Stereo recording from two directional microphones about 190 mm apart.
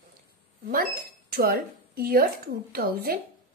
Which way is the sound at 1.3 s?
50° right (ahead or behind).